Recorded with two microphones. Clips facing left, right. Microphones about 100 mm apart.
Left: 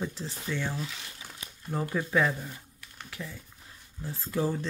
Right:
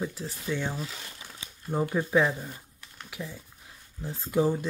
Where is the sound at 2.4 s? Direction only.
5° right (ahead or behind).